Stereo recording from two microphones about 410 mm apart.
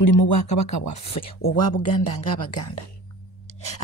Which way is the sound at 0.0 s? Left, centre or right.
Left.